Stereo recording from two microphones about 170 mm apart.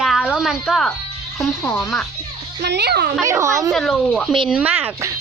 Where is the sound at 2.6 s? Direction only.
80° right.